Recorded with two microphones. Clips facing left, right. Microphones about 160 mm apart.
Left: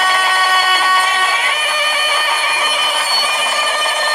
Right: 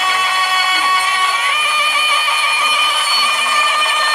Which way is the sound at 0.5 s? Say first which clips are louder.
Left 3 dB; 45° left (ahead or behind).